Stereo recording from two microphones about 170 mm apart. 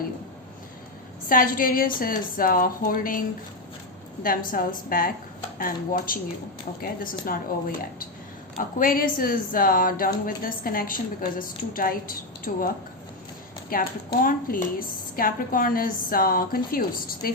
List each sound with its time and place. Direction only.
1.3 s a woman's voice: 55° left (ahead or behind)
8.5 s a woman's voice: 55° left (ahead or behind)
13.7 s a woman's voice: 55° left (ahead or behind)